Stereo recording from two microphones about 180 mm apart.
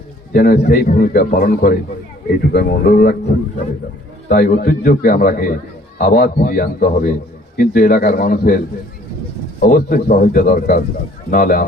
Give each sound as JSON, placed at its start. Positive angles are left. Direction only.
{"t": 0.3, "sound": "a man's voice", "side_deg": 55}
{"t": 4.3, "sound": "a man's voice", "side_deg": 55}
{"t": 6.0, "sound": "a man's voice", "side_deg": 60}